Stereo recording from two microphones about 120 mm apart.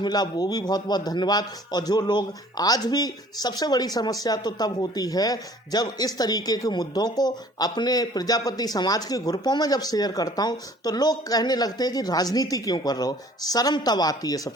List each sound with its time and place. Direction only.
0.0 s a man's voice: 35° left (ahead or behind)